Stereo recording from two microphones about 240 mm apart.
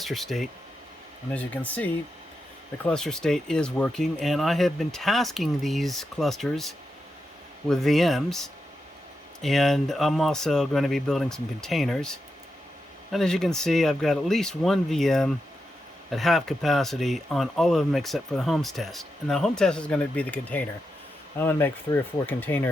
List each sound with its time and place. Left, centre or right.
0.0 s speech: centre